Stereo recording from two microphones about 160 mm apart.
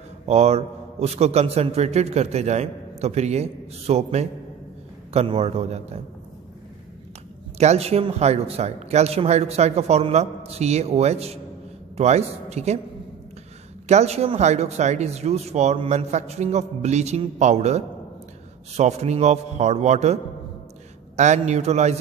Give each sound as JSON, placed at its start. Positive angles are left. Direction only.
{"t": 0.3, "sound": "a man's voice", "side_deg": -40}
{"t": 7.5, "sound": "a man's voice", "side_deg": -40}
{"t": 13.8, "sound": "speech", "side_deg": -45}
{"t": 21.2, "sound": "speech", "side_deg": -45}